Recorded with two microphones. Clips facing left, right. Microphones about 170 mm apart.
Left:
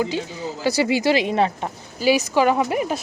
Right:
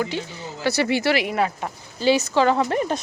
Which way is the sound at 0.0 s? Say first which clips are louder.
Left 3 dB; 15° left (ahead or behind).